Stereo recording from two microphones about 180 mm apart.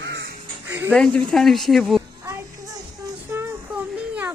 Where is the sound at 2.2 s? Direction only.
15° right (ahead or behind).